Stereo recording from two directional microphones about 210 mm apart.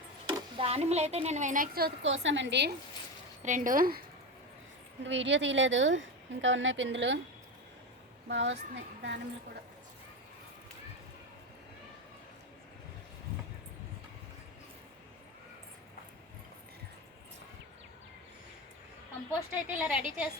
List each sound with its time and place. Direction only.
0.3 s a woman's voice: 25° right (ahead or behind); by 2.7 s 55° right (ahead or behind)
3.4 s speech: 40° right (ahead or behind)
5.0 s a woman's voice: 60° right (ahead or behind)
8.3 s a woman's voice: 60° right (ahead or behind)
19.3 s a woman's voice: 5° right (ahead or behind)